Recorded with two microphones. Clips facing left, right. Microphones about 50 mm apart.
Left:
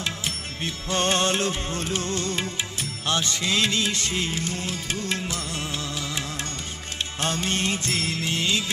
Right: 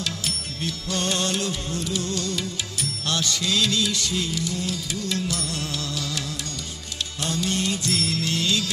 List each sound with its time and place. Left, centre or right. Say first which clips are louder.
0.7 s music: left 3 dB; left
7.2 s music: even; left